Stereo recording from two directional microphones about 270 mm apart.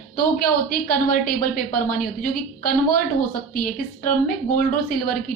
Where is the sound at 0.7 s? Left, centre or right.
Left.